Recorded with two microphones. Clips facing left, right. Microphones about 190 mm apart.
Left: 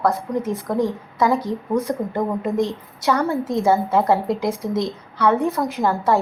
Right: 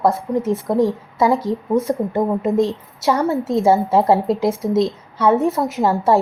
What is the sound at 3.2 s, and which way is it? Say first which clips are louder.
A woman's voice: right 3 dB; 25° right (ahead or behind).